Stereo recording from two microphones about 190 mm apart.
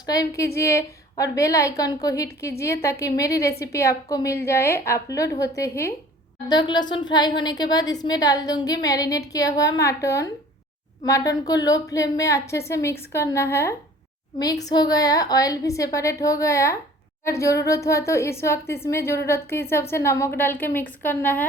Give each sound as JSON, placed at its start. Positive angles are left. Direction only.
{"t": 0.0, "sound": "a woman's voice", "side_deg": 20}